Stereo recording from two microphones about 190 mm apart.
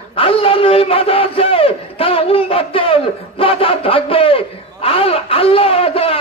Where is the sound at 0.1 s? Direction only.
30° left (ahead or behind).